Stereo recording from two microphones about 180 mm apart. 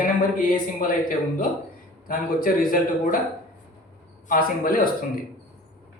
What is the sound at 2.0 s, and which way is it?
A man's voice, 50° left (ahead or behind).